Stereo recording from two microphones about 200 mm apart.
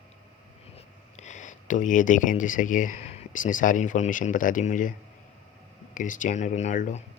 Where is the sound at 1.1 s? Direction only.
35° left (ahead or behind).